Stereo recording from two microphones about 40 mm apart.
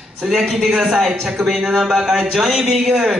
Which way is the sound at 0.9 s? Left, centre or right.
Centre.